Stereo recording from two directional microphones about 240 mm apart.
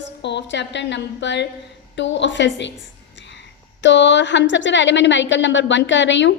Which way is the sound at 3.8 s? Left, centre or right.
Left.